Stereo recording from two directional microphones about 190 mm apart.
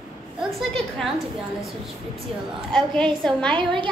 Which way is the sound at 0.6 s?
Centre (ahead or behind).